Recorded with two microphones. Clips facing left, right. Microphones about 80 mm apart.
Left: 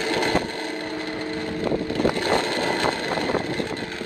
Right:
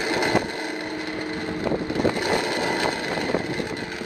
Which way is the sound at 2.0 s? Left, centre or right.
Centre.